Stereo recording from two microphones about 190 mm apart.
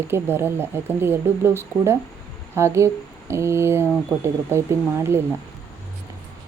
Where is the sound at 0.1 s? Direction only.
10° right (ahead or behind).